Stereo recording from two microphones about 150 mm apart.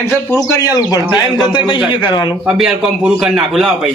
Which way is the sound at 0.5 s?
25° left (ahead or behind).